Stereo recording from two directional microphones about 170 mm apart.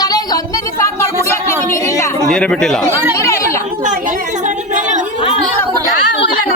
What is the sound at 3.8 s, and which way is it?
A woman's voice, 50° right (ahead or behind).